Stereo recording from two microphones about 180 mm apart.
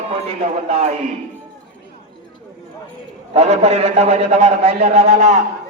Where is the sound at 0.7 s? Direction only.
35° right (ahead or behind).